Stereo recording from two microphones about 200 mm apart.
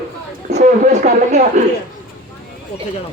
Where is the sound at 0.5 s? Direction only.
35° right (ahead or behind).